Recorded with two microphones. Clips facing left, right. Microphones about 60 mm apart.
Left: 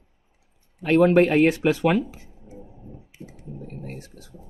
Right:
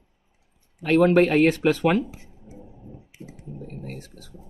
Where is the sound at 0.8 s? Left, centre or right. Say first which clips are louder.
Left 1 dB; centre.